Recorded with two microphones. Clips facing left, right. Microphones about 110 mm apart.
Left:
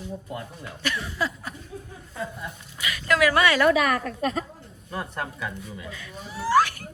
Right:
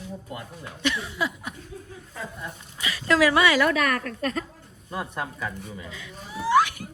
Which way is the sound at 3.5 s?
Centre (ahead or behind).